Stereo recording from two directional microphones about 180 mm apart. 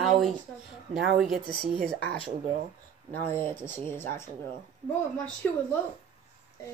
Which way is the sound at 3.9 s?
15° left (ahead or behind).